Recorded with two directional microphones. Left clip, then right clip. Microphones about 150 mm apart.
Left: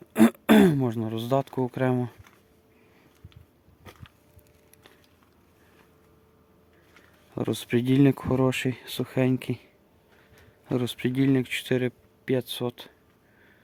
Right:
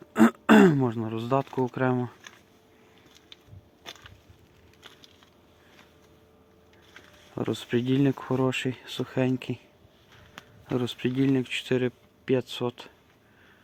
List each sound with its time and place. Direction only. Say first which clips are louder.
0.1 s throat clearing: right 1 dB; 45° left (ahead or behind)
1.5 s speech: even; 35° left (ahead or behind)
7.3 s speech: left 1 dB; 50° left (ahead or behind)
9.0 s speech: left 2 dB; 35° left (ahead or behind)
10.7 s speech: left 1 dB; 40° left (ahead or behind)